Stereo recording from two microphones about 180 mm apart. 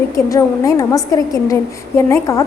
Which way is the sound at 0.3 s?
20° left (ahead or behind).